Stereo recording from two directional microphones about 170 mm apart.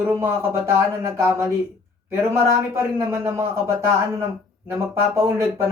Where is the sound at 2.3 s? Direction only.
15° right (ahead or behind).